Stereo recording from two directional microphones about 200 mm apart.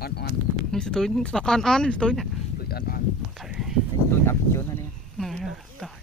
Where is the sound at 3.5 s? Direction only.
Centre (ahead or behind).